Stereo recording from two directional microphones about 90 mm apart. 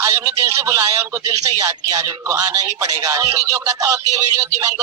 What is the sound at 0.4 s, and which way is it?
A man's voice, 35° right (ahead or behind).